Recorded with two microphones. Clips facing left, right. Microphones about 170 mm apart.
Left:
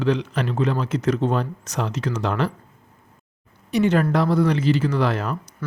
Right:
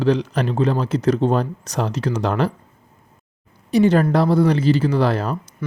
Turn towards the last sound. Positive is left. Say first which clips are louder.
# right 3 dB
turn(degrees=-35)  # may be behind; listen again after turning